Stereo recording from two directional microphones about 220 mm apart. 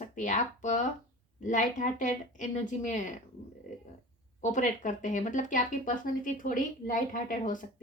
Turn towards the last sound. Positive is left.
turn(degrees=35)  # may be behind; listen again after turning